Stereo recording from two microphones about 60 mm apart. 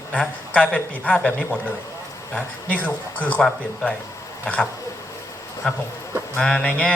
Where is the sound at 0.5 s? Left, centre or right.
Left.